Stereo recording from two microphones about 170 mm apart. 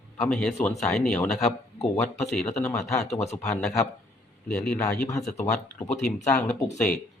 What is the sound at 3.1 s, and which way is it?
Speech, 40° left (ahead or behind).